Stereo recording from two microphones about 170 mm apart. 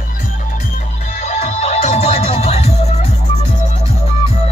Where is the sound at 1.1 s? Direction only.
40° left (ahead or behind).